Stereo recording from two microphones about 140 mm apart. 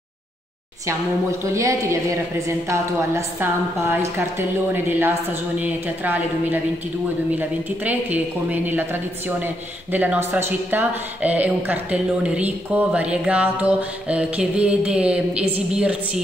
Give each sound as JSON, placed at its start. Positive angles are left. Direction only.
{"t": 1.4, "sound": "a woman's voice", "side_deg": -20}
{"t": 9.9, "sound": "a woman's voice", "side_deg": -10}